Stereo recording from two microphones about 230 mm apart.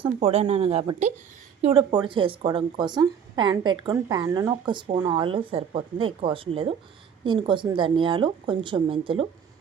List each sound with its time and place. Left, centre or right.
0.0 s speech: right
1.6 s speech: right